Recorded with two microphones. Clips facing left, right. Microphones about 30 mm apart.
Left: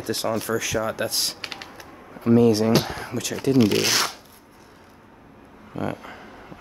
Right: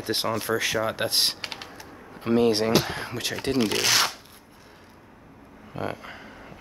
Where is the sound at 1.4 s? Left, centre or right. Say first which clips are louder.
Left 1 dB; centre.